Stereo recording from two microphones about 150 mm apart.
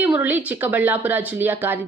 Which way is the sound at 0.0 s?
10° right (ahead or behind).